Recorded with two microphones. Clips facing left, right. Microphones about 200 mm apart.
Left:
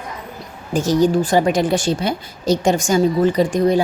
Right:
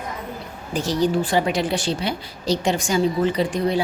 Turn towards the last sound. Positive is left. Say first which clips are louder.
# left 5 dB
turn(degrees=45)  # may be behind; listen again after turning